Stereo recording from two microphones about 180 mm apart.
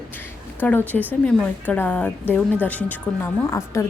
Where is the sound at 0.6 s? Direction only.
10° left (ahead or behind).